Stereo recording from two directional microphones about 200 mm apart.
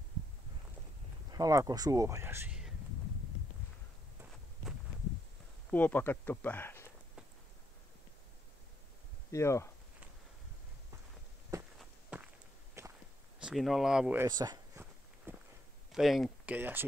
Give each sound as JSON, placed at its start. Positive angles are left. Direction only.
{"t": 1.3, "sound": "speech", "side_deg": -15}
{"t": 5.7, "sound": "speech", "side_deg": 10}
{"t": 9.3, "sound": "speech", "side_deg": 15}
{"t": 11.8, "sound": "walk", "side_deg": -5}
{"t": 12.8, "sound": "whip", "side_deg": -15}
{"t": 13.4, "sound": "a sound", "side_deg": 0}
{"t": 15.9, "sound": "speech", "side_deg": 0}